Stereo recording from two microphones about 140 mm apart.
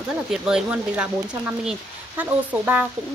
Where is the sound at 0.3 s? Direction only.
5° right (ahead or behind).